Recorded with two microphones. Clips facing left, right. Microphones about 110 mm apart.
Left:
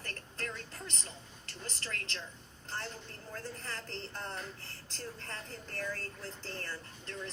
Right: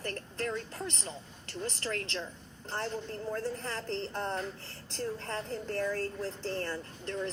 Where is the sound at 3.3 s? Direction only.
30° right (ahead or behind).